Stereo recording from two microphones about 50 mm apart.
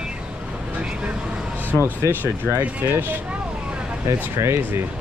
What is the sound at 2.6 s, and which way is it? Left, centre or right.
Speech, right.